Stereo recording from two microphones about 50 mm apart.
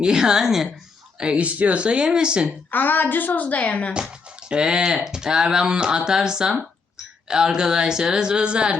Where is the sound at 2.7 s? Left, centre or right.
Left.